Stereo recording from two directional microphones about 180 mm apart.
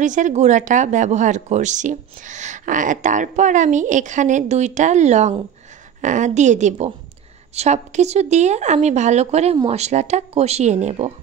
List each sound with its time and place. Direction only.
0.0 s speech: 45° right (ahead or behind)